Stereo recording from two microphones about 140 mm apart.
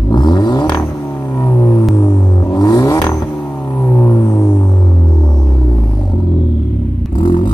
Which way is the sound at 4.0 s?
25° left (ahead or behind).